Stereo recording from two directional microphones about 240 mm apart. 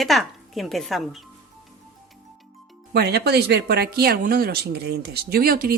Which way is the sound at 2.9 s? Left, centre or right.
Right.